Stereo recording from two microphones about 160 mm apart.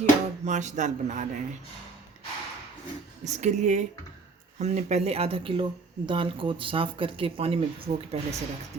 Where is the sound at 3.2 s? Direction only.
45° right (ahead or behind).